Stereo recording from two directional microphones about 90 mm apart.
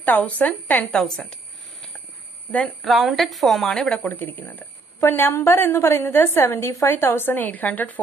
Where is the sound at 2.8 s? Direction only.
Centre (ahead or behind).